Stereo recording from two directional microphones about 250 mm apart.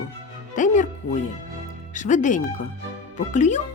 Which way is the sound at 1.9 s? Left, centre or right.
Left.